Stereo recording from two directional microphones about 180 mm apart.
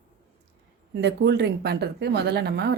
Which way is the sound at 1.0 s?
70° right (ahead or behind).